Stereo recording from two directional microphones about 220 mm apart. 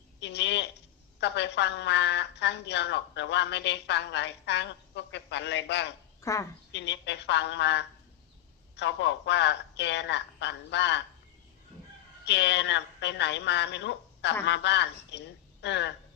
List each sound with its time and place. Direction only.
0.2 s a woman's voice: 50° left (ahead or behind)
6.2 s a woman's voice: 15° left (ahead or behind)
6.7 s a woman's voice: 50° left (ahead or behind)
12.2 s a woman's voice: 50° left (ahead or behind)